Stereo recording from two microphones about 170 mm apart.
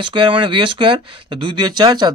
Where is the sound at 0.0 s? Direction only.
30° right (ahead or behind).